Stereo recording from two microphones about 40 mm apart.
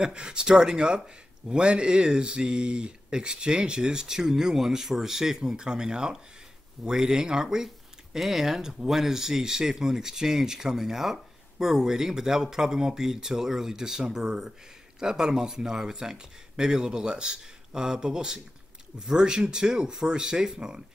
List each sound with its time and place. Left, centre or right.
0.0 s speech: centre